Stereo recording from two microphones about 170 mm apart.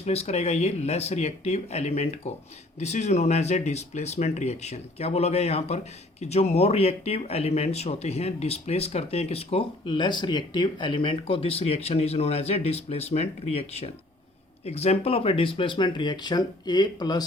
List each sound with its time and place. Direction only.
0.0 s speech: 40° left (ahead or behind)